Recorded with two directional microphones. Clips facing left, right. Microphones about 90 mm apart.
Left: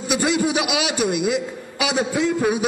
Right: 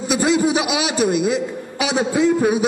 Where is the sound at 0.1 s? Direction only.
25° right (ahead or behind).